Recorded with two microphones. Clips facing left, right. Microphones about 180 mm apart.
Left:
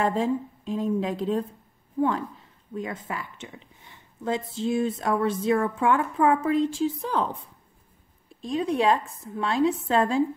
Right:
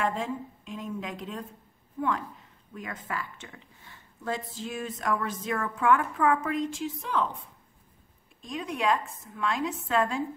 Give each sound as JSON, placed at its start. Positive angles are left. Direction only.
{"t": 0.0, "sound": "a woman's voice", "side_deg": 35}
{"t": 8.4, "sound": "a woman's voice", "side_deg": 30}